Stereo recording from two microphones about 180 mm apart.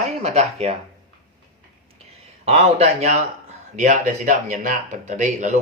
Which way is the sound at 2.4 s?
35° right (ahead or behind).